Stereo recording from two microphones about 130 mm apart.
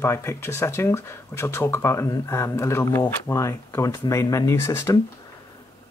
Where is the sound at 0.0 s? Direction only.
20° left (ahead or behind).